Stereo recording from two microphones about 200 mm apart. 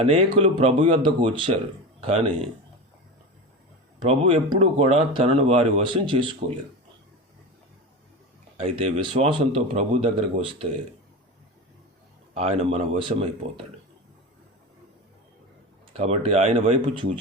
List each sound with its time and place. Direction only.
0.0 s speech: 30° right (ahead or behind)
4.1 s speech: 30° right (ahead or behind)
9.0 s speech: 25° right (ahead or behind)
12.3 s speech: 35° right (ahead or behind)
15.9 s speech: 30° right (ahead or behind)